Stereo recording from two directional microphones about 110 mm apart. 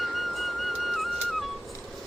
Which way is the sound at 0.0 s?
Centre (ahead or behind).